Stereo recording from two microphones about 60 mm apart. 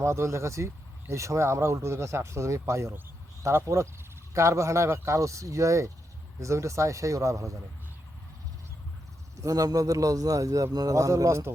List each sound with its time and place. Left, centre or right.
0.0 s speech: right
9.4 s a man's voice: right